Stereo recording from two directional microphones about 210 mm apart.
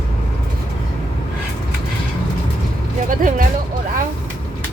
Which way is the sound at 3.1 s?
40° right (ahead or behind).